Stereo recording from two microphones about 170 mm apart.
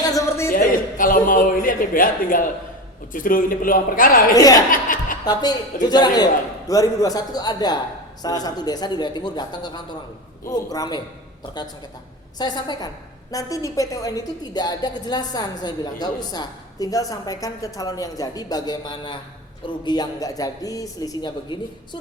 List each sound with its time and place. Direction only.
0.0 s a sound: 20° left (ahead or behind)
0.5 s a sound: 55° left (ahead or behind)
3.1 s a man's voice: 55° left (ahead or behind)
4.7 s chuckle: 55° left (ahead or behind)
5.2 s a woman's voice: 25° left (ahead or behind)
12.4 s a woman's voice: 25° left (ahead or behind)